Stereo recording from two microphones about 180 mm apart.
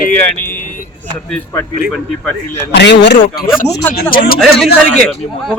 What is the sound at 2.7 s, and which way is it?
Speech, 70° left (ahead or behind).